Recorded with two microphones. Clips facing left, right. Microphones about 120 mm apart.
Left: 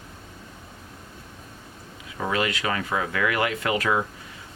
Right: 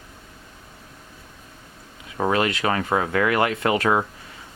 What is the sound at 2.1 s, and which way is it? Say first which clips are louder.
Speech: right 4 dB; 40° right (ahead or behind).